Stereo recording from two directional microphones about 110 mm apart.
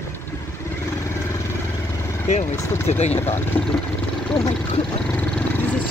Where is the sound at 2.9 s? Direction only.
75° left (ahead or behind).